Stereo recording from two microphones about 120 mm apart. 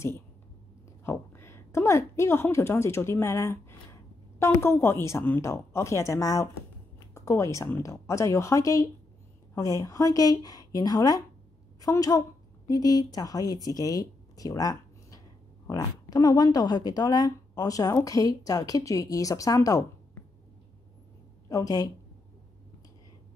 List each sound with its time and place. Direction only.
1.0 s a woman's voice: 20° left (ahead or behind)
21.5 s speech: 30° left (ahead or behind)